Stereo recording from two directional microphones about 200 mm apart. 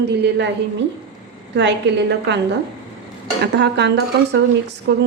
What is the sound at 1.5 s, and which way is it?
A woman's voice, 60° right (ahead or behind).